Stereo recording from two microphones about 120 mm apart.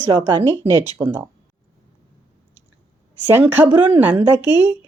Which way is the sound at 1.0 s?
20° right (ahead or behind).